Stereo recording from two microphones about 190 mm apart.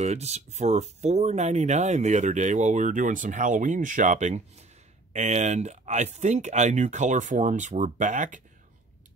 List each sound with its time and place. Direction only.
0.0 s speech: 35° right (ahead or behind)